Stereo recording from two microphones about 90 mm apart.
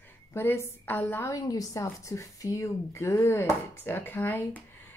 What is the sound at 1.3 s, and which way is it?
A woman's voice, 40° left (ahead or behind).